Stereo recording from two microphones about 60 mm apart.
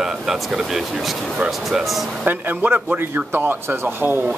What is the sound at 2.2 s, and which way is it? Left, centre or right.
Speech, right.